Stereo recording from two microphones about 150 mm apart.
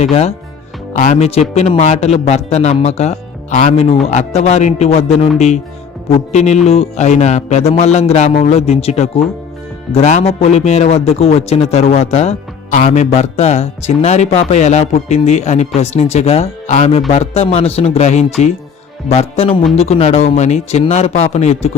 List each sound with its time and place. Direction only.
0.0 s speech: 45° left (ahead or behind)